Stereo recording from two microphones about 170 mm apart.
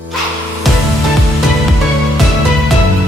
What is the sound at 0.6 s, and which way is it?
Music, centre (ahead or behind).